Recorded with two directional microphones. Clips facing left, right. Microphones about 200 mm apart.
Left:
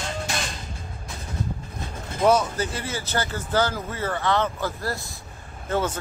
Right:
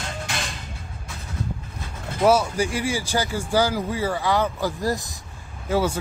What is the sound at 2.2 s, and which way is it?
Speech, 10° right (ahead or behind).